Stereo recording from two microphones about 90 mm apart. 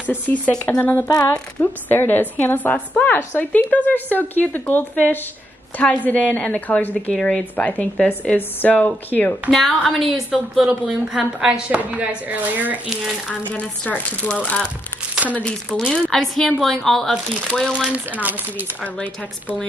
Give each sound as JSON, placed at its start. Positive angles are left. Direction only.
{"t": 0.1, "sound": "speech", "side_deg": 15}
{"t": 1.0, "sound": "a sound", "side_deg": 35}
{"t": 1.6, "sound": "a woman's voice", "side_deg": 25}
{"t": 9.5, "sound": "a woman's voice", "side_deg": 0}
{"t": 13.5, "sound": "speech", "side_deg": 15}
{"t": 17.7, "sound": "a woman's voice", "side_deg": -10}